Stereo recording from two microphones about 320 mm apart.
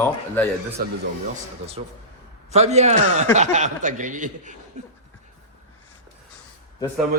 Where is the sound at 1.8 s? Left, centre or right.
Centre.